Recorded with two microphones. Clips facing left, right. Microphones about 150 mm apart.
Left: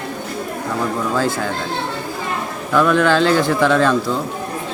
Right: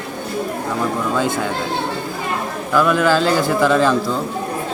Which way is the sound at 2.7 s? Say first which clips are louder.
Left 1 dB; 5° right (ahead or behind).